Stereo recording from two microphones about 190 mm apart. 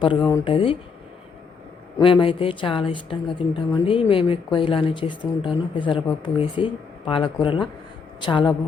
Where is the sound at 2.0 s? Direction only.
25° left (ahead or behind).